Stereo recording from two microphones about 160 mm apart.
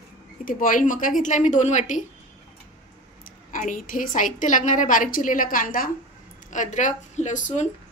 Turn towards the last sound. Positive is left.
turn(degrees=50)  # may be behind; listen again after turning